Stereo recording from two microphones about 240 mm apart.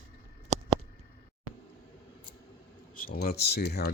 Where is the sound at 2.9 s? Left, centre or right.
Left.